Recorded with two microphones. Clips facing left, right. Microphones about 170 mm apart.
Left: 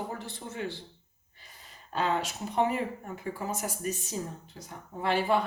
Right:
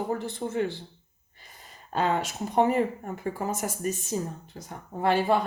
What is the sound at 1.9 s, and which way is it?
Speech, 45° right (ahead or behind).